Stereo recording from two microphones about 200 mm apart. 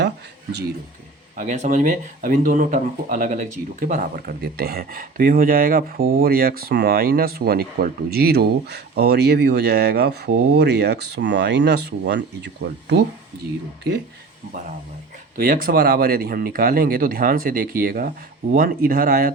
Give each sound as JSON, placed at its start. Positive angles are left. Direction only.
{"t": 1.4, "sound": "speech", "side_deg": -40}
{"t": 15.4, "sound": "speech", "side_deg": -45}